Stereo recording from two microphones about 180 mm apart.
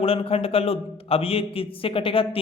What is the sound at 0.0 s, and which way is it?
Speech, 30° left (ahead or behind).